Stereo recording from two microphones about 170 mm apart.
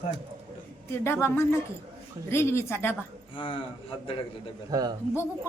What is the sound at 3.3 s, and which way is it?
Speech, 30° left (ahead or behind).